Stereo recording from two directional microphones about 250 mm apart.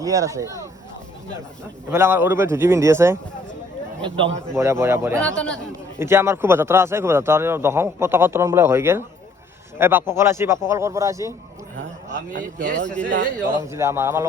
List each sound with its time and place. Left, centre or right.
0.0 s speech: centre
1.9 s speech: centre
5.2 s a man's voice: centre
6.0 s speech: centre
12.3 s speech: right
13.6 s speech: centre